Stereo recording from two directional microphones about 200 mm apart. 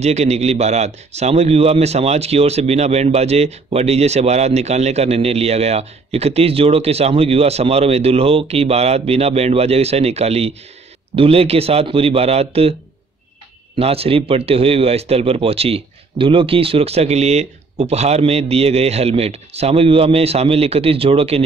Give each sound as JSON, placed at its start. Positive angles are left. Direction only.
{"t": 0.0, "sound": "a man's voice", "side_deg": -35}
{"t": 13.7, "sound": "speech", "side_deg": -30}